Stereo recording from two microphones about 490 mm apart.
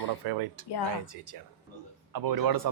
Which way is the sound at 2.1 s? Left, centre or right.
Right.